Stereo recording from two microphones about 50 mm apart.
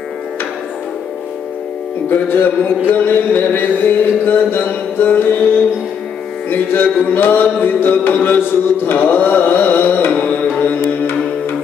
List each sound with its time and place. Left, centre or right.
2.0 s mantra: left
2.9 s music: left
6.5 s music: left
7.6 s mantra: left
10.6 s music: left